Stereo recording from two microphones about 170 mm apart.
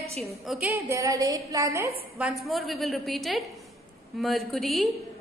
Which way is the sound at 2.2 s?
Centre (ahead or behind).